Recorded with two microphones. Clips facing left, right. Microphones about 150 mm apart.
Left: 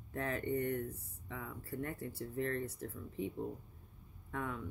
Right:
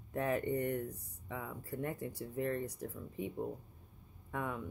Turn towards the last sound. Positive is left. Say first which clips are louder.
# right 1 dB
turn(degrees=-15)  # may be behind; listen again after turning